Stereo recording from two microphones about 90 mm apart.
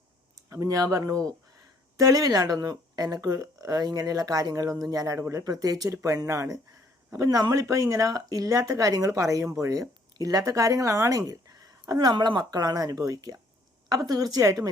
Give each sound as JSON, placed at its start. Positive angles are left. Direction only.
{"t": 0.5, "sound": "speech", "side_deg": -40}